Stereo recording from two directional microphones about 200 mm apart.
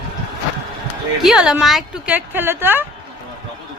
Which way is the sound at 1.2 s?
Centre (ahead or behind).